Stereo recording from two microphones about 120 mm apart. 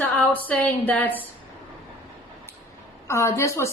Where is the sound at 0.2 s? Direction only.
10° left (ahead or behind).